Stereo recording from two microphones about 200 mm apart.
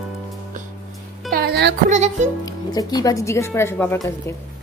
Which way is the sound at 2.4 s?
20° left (ahead or behind).